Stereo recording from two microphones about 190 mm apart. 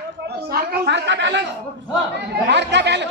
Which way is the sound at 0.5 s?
60° right (ahead or behind).